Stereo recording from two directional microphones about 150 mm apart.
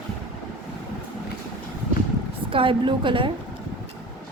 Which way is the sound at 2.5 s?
35° right (ahead or behind).